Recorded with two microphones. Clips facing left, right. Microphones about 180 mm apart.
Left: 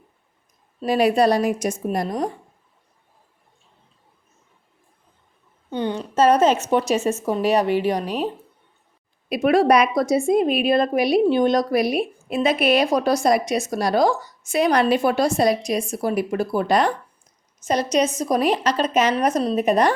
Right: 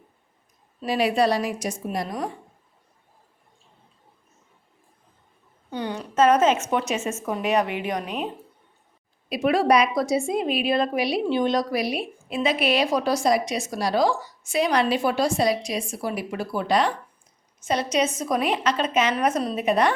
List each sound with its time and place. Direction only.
0.9 s a woman's voice: 45° left (ahead or behind)
5.7 s a woman's voice: 25° left (ahead or behind)
6.1 s speech: 35° left (ahead or behind)
9.3 s a woman's voice: 50° left (ahead or behind)